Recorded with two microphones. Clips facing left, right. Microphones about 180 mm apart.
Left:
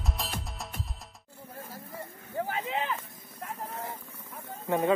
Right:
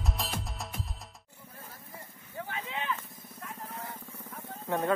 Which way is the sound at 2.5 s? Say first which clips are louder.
Left 1 dB; 35° left (ahead or behind).